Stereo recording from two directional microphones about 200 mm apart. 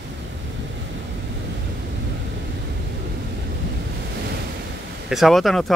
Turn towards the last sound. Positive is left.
turn(degrees=0)  # may be behind; listen again after turning